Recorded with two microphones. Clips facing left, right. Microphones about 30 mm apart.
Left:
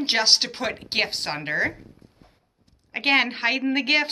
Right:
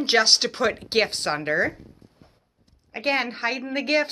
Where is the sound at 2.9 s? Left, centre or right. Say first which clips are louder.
Left 4 dB; left.